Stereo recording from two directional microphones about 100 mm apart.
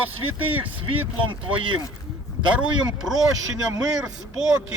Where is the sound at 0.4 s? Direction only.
65° right (ahead or behind).